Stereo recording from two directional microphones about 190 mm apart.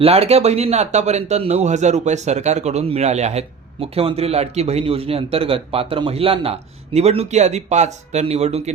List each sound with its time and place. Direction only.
0.0 s a man's voice: 30° right (ahead or behind)